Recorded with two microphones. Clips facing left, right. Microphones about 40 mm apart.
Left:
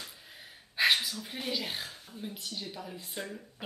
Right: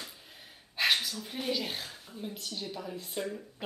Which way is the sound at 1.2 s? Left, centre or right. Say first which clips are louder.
Right 2 dB; centre.